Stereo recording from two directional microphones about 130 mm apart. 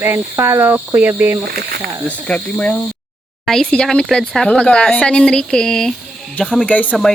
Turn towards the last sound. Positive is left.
turn(degrees=10)  # may be behind; listen again after turning